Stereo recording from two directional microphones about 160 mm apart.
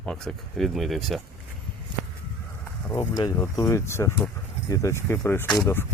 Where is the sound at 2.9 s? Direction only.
25° left (ahead or behind).